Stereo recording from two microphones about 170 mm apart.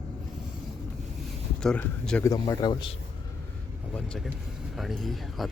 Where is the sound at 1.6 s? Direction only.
5° left (ahead or behind).